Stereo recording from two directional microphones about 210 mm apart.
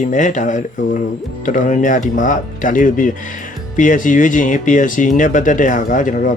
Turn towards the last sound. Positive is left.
turn(degrees=40)  # may be behind; listen again after turning